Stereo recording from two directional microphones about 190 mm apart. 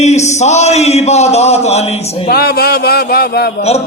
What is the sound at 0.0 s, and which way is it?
Speech, 35° left (ahead or behind).